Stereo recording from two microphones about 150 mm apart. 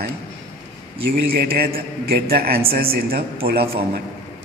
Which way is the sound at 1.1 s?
90° right.